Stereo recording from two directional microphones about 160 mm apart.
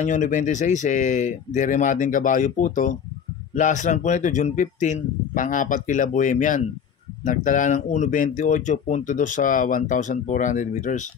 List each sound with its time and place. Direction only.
0.0 s speech: 50° left (ahead or behind)